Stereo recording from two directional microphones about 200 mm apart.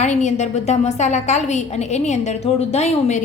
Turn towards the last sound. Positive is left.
turn(degrees=35)  # may be behind; listen again after turning